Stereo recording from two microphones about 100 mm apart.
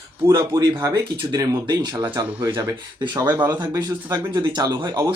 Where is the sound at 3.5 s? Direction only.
40° right (ahead or behind).